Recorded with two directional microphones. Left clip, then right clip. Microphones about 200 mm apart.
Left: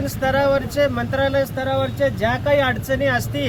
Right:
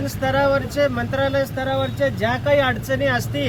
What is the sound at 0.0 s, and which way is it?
Speech, 10° left (ahead or behind).